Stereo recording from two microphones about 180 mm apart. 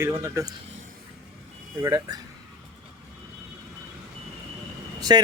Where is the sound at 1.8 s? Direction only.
20° right (ahead or behind).